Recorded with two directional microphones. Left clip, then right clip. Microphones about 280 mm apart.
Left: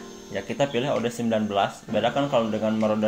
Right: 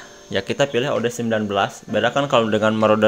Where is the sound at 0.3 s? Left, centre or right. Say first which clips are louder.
Right 6 dB; right.